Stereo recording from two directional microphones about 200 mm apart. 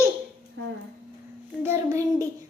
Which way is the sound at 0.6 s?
65° right (ahead or behind).